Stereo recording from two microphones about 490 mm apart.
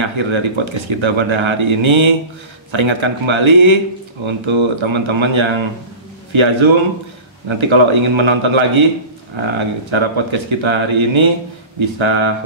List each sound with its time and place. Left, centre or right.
0.0 s speech: right